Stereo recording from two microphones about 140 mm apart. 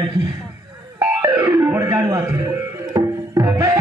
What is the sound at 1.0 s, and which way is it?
Music, 20° right (ahead or behind).